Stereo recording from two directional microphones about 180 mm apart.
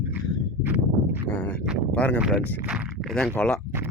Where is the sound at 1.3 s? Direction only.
10° left (ahead or behind).